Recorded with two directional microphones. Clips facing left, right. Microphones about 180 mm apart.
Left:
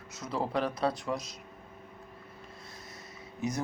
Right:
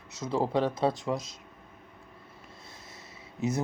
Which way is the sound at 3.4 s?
25° right (ahead or behind).